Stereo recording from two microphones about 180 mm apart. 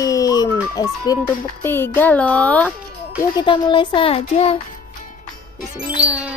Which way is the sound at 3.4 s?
25° left (ahead or behind).